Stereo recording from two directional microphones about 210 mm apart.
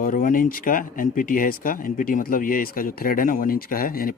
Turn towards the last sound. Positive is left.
turn(degrees=45)  # may be behind; listen again after turning